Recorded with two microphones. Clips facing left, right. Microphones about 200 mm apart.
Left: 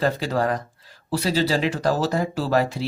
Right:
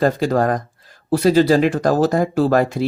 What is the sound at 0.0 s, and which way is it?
Speech, 50° right (ahead or behind).